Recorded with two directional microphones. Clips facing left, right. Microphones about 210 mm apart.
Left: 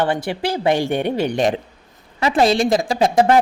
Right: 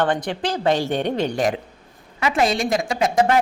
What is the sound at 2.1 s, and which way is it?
A woman's voice, 35° left (ahead or behind).